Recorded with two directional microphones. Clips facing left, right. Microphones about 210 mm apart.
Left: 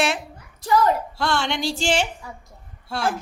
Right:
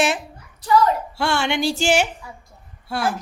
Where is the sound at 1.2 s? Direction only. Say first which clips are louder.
Right 3 dB; 10° right (ahead or behind).